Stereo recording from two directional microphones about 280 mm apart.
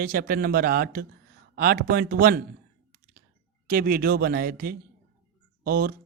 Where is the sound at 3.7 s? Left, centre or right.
Right.